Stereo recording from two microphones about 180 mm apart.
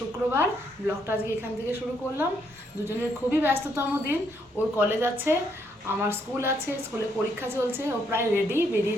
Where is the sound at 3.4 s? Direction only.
15° right (ahead or behind).